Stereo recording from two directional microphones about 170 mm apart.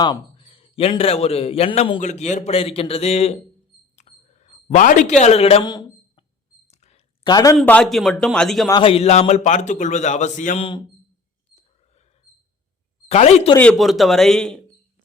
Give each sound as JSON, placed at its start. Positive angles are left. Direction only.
{"t": 0.0, "sound": "a man's voice", "side_deg": 30}
{"t": 3.9, "sound": "a sound", "side_deg": 40}
{"t": 6.7, "sound": "a sound", "side_deg": 40}
{"t": 7.3, "sound": "speech", "side_deg": 25}
{"t": 7.5, "sound": "a man's voice", "side_deg": 10}
{"t": 8.7, "sound": "a man's voice", "side_deg": 30}
{"t": 13.1, "sound": "speech", "side_deg": 40}
{"t": 13.6, "sound": "a man's voice", "side_deg": 5}